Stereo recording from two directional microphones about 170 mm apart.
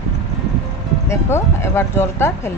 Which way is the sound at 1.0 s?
15° left (ahead or behind).